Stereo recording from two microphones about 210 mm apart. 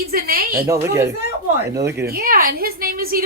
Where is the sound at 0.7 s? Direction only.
15° right (ahead or behind).